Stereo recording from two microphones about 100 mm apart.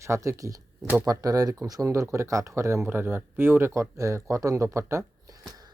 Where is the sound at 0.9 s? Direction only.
35° right (ahead or behind).